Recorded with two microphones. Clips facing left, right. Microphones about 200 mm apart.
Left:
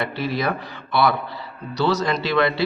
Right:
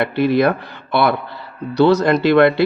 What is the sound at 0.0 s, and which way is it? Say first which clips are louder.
A man's voice: right 9 dB; 60° right (ahead or behind).